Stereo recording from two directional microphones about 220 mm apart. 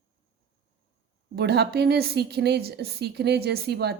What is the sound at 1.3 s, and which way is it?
A woman's voice, 50° right (ahead or behind).